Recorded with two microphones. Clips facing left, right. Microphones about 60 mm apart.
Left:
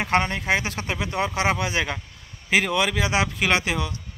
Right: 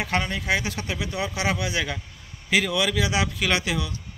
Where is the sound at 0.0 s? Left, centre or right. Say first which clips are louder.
Left 4 dB; left.